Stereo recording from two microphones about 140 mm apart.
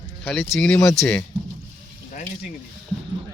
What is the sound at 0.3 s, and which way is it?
Speech, centre (ahead or behind).